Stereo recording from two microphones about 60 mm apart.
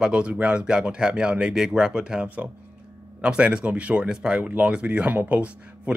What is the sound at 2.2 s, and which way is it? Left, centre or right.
Speech, right.